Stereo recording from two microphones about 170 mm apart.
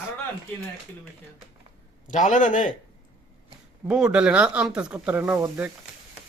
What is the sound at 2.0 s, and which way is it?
Speech, 50° left (ahead or behind).